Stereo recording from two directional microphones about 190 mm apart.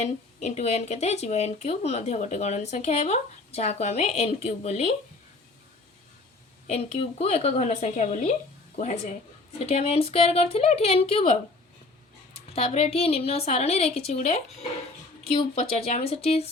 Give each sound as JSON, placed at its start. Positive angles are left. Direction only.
{"t": 0.0, "sound": "speech", "side_deg": 35}
{"t": 6.7, "sound": "speech", "side_deg": 30}
{"t": 12.5, "sound": "speech", "side_deg": 30}